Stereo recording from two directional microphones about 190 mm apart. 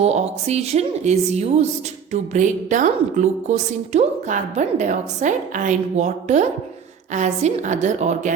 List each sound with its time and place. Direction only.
0.0 s a woman's voice: 35° right (ahead or behind)